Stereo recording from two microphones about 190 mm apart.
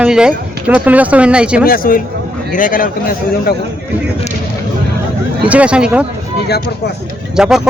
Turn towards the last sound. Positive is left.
turn(degrees=-5)  # may be behind; listen again after turning